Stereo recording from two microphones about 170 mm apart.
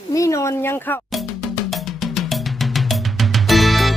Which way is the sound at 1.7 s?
Centre (ahead or behind).